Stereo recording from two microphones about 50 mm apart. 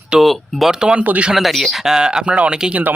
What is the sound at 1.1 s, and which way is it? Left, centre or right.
Speech, right.